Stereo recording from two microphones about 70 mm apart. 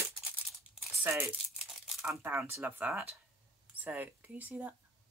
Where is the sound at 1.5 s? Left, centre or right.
Centre.